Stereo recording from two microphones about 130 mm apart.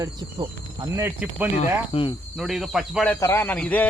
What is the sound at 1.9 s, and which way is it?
Cricket, 40° left (ahead or behind).